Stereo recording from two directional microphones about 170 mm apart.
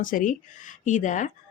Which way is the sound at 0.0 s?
50° left (ahead or behind).